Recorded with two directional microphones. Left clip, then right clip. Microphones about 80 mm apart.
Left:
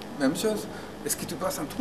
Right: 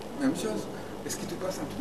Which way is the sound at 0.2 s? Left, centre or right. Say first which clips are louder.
Left 4 dB; left.